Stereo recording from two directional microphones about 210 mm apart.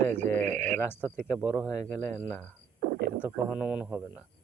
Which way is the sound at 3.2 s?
5° right (ahead or behind).